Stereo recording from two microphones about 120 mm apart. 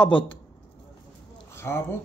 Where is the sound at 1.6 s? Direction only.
20° left (ahead or behind).